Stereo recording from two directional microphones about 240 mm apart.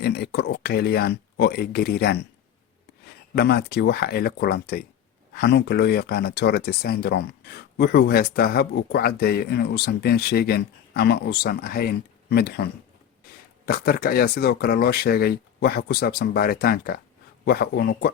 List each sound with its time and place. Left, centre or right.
0.0 s speech: left
3.3 s speech: left
13.7 s speech: left